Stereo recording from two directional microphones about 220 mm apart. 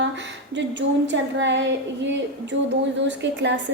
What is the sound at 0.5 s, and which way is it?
A woman's voice, 55° right (ahead or behind).